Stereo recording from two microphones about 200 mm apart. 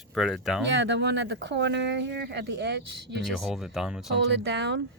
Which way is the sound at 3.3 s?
Centre (ahead or behind).